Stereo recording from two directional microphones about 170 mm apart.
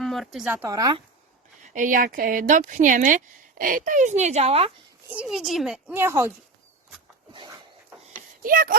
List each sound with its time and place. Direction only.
0.0 s a sound: centre (ahead or behind)
0.4 s speech: 15° right (ahead or behind)
1.6 s speech: 50° right (ahead or behind)
5.0 s a child's voice: 5° right (ahead or behind)
7.3 s a sound: 25° right (ahead or behind)
8.4 s speech: 55° right (ahead or behind)